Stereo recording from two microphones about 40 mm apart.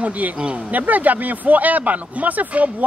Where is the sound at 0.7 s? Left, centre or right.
Right.